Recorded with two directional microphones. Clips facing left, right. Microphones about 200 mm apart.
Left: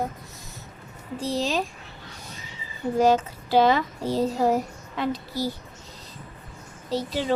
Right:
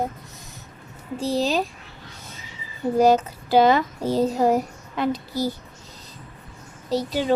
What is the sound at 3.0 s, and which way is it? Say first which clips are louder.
A child's voice: right 3 dB; 40° right (ahead or behind).